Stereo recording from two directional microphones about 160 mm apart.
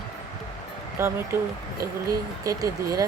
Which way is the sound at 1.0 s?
15° right (ahead or behind).